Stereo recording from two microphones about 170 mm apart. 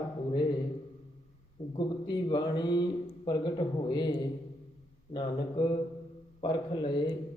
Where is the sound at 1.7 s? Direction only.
25° left (ahead or behind).